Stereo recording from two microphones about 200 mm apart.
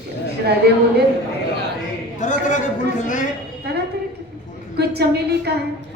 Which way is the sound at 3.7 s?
55° right (ahead or behind).